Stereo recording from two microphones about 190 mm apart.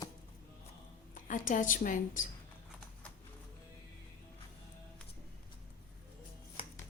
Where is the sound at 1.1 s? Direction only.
45° left (ahead or behind).